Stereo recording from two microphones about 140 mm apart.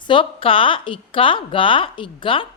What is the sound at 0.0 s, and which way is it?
A woman's voice, 35° left (ahead or behind).